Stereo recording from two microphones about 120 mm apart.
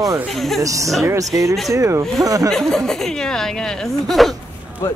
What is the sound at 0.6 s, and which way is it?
Speech, 25° right (ahead or behind).